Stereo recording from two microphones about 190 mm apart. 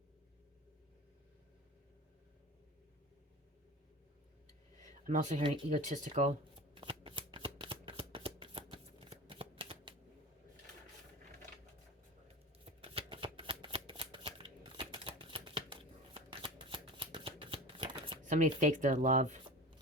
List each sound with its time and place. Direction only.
4.8 s a sound: 40° right (ahead or behind)
5.5 s shuffling cards: 35° right (ahead or behind)
12.8 s shuffling cards: 30° right (ahead or behind)
18.3 s speech: 40° right (ahead or behind)